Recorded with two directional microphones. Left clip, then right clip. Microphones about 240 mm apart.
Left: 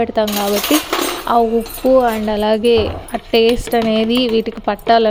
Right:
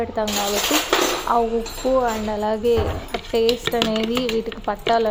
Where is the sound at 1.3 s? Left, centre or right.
Left.